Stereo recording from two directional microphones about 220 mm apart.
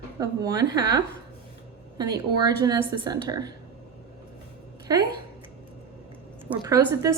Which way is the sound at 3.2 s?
15° right (ahead or behind).